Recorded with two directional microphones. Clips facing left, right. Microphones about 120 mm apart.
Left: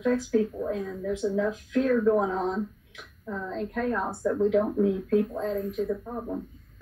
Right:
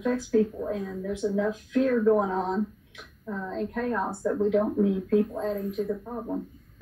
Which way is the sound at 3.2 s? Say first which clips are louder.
Right 1 dB; 10° right (ahead or behind).